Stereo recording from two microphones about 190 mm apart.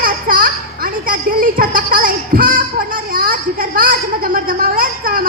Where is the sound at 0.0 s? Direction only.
50° right (ahead or behind).